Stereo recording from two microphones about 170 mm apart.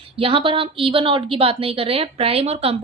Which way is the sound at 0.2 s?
30° right (ahead or behind).